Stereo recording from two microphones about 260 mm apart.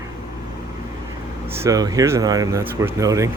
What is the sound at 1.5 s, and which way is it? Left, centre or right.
Speech, centre.